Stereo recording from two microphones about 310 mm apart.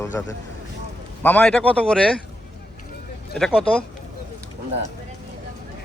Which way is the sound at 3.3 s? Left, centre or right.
Centre.